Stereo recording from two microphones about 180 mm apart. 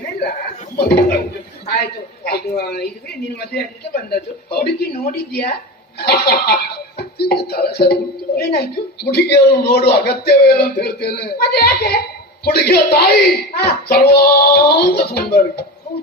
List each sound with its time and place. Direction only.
0.0 s chuckle: 60° left (ahead or behind)
0.8 s a man's voice: 65° left (ahead or behind)
2.2 s a man's voice: 60° left (ahead or behind)